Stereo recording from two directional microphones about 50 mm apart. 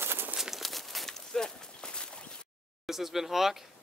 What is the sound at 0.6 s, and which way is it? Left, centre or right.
Walk, centre.